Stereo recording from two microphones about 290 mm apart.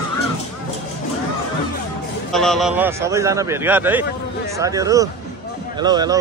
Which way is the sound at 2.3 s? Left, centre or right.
Centre.